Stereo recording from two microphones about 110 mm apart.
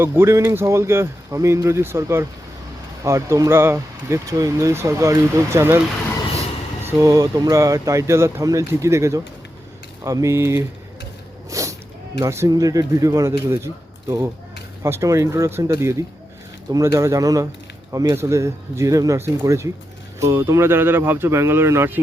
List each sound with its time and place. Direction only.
0.0 s speech: 20° right (ahead or behind)
6.8 s speech: 30° right (ahead or behind)
11.5 s a sound: 30° right (ahead or behind)
12.2 s speech: 25° right (ahead or behind)
14.8 s speech: 25° right (ahead or behind)